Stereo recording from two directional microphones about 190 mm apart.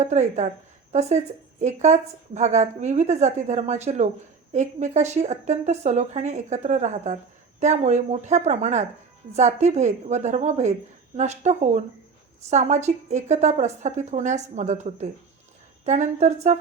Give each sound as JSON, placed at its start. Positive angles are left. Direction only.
{"t": 0.0, "sound": "speech", "side_deg": -35}
{"t": 1.6, "sound": "speech", "side_deg": -35}